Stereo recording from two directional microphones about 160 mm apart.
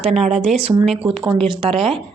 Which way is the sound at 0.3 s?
45° right (ahead or behind).